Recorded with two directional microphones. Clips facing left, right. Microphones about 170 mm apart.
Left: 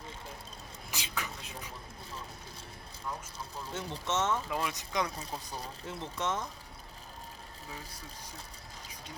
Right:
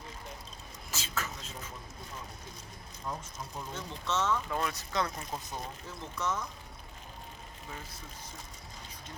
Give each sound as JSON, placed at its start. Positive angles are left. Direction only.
{"t": 0.9, "sound": "a sound", "side_deg": 15}
{"t": 3.8, "sound": "speech", "side_deg": 20}
{"t": 4.4, "sound": "speech", "side_deg": 10}
{"t": 6.0, "sound": "speech", "side_deg": 25}